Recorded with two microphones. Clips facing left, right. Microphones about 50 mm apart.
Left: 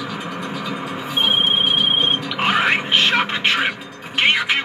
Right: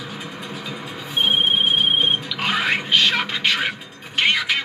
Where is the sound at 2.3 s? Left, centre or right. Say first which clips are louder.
Left 4 dB; left.